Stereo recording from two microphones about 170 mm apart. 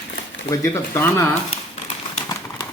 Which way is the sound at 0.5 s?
20° left (ahead or behind).